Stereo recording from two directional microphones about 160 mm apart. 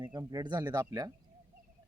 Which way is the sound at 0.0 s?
25° right (ahead or behind).